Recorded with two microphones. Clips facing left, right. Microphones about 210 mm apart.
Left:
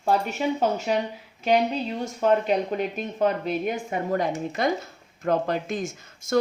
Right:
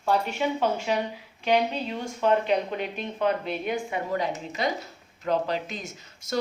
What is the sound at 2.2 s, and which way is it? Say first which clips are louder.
A woman's voice: left 1 dB; 45° left (ahead or behind).